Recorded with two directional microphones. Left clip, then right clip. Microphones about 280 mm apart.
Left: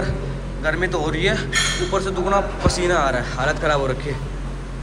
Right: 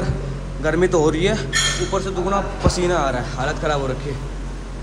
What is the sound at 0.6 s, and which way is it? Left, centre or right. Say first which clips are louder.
A man's voice: right 4 dB; right.